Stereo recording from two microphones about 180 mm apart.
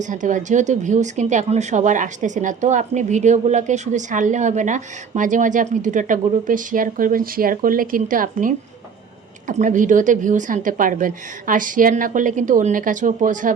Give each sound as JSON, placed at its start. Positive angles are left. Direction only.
{"t": 0.0, "sound": "speech", "side_deg": -45}